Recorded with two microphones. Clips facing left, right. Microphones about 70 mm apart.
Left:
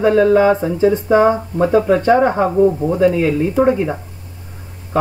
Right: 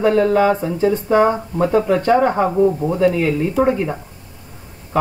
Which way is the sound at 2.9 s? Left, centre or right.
Centre.